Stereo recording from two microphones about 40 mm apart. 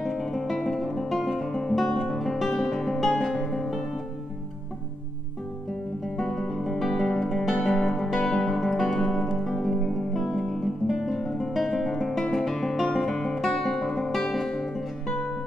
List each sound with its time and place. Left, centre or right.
0.0 s guitar: centre
1.6 s music: centre
6.0 s guitar: centre
7.6 s music: centre
10.1 s guitar: centre
11.5 s music: centre
13.5 s guitar: centre